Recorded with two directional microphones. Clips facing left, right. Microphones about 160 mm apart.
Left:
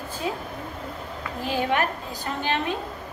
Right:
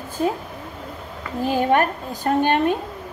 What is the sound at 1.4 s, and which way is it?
A woman's voice, 45° right (ahead or behind).